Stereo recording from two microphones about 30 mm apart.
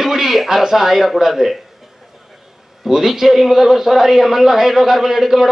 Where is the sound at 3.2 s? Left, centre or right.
Centre.